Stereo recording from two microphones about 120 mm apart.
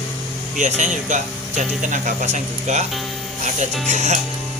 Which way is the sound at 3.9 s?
75° right (ahead or behind).